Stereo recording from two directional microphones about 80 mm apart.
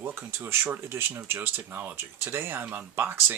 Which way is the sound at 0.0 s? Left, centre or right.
Right.